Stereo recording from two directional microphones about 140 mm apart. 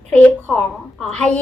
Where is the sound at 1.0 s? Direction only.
5° left (ahead or behind).